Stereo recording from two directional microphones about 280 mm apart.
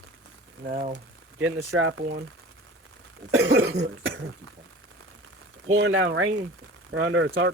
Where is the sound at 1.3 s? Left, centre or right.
Right.